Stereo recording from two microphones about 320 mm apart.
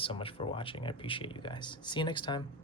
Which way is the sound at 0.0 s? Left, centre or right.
Centre.